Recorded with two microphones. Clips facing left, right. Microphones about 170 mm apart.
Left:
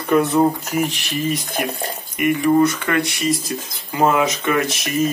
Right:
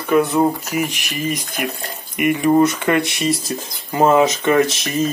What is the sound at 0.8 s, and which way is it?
Speech, 15° right (ahead or behind).